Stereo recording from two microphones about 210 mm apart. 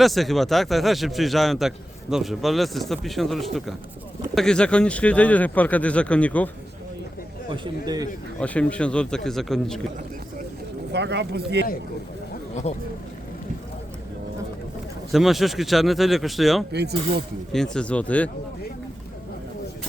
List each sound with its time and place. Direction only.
0.0 s a man's voice: centre (ahead or behind)
7.5 s a man's voice: 20° right (ahead or behind)
8.4 s a man's voice: 5° left (ahead or behind)
10.9 s speech: 55° right (ahead or behind)
15.1 s a man's voice: centre (ahead or behind)